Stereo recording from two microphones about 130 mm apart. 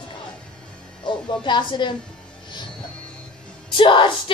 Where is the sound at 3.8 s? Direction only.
40° left (ahead or behind).